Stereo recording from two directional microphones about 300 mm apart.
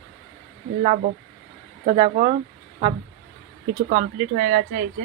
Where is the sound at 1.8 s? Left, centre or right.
Centre.